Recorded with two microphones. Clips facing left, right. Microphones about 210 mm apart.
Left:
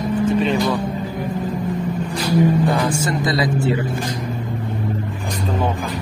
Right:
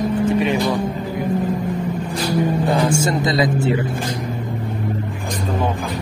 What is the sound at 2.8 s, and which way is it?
Speech, 25° right (ahead or behind).